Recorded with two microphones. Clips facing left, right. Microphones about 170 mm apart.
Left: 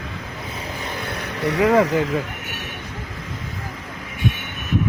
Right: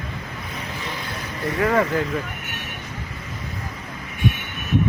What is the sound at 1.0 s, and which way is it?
Vehicle, 70° left (ahead or behind).